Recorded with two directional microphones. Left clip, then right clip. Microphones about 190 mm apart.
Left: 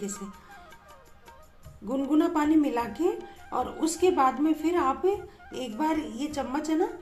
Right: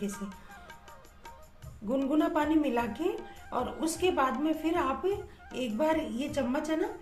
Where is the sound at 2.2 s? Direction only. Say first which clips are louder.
Left 5 dB; 20° left (ahead or behind).